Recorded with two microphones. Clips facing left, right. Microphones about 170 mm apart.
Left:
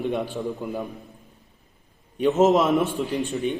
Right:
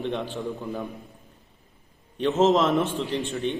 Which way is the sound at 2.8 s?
40° left (ahead or behind).